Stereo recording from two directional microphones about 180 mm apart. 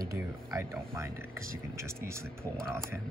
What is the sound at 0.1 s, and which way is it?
Speech, 15° right (ahead or behind).